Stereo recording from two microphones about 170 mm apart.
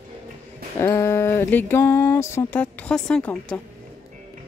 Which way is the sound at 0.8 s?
15° left (ahead or behind).